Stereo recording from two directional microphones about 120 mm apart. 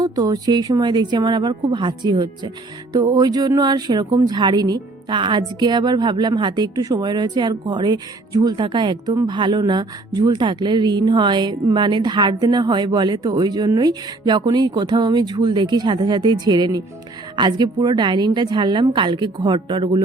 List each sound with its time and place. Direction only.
0.0 s a woman's voice: 35° right (ahead or behind)